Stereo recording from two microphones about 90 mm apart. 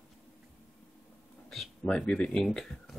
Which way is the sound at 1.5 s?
Centre (ahead or behind).